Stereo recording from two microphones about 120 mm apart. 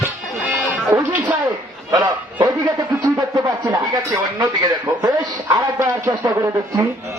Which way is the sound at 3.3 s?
25° right (ahead or behind).